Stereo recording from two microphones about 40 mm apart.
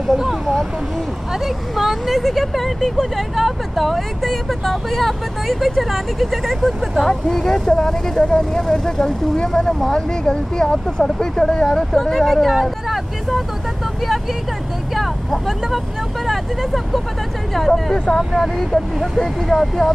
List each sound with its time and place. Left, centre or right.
0.1 s speech: centre
7.1 s speech: centre
15.0 s speech: centre
17.9 s speech: left
19.1 s speech: centre